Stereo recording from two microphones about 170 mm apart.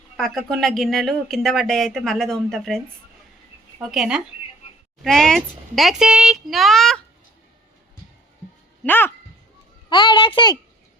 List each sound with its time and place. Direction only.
0.2 s speech: centre (ahead or behind)
8.8 s speech: 10° left (ahead or behind)
9.9 s a child's voice: 30° left (ahead or behind)